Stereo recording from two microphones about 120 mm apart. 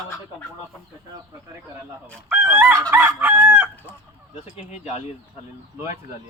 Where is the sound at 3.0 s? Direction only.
15° right (ahead or behind).